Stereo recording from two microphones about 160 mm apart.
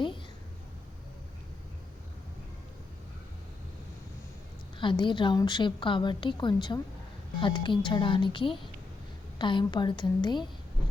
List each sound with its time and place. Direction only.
4.8 s a woman's voice: 30° left (ahead or behind)